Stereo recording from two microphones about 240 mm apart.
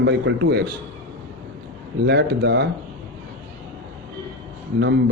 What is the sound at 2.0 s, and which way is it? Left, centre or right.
Speech, right.